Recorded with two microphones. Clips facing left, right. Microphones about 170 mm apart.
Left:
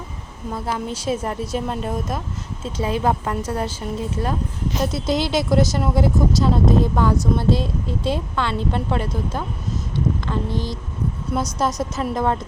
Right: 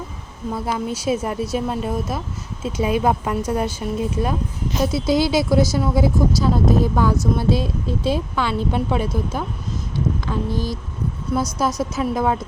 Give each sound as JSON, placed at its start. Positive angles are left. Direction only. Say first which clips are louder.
{"t": 0.5, "sound": "speech", "louder": "right 2 dB", "side_deg": -10}
{"t": 11.3, "sound": "speech", "louder": "right 2 dB", "side_deg": 0}